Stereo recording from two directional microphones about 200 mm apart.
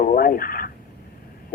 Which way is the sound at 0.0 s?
45° left (ahead or behind).